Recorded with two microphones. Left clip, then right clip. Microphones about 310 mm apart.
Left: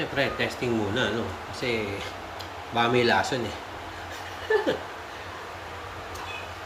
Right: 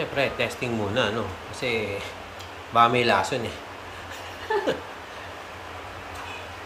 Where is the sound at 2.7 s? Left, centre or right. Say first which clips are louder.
Right 3 dB; centre.